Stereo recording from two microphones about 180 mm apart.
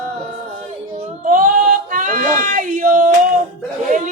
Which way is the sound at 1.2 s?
45° right (ahead or behind).